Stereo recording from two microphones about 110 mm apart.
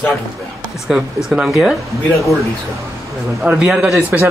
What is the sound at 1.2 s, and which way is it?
Speech, 5° right (ahead or behind).